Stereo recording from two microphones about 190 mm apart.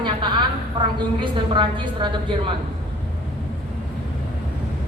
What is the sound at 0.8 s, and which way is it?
A woman's voice, 25° right (ahead or behind).